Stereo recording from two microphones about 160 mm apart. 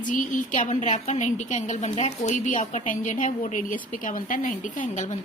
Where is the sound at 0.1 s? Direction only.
50° left (ahead or behind).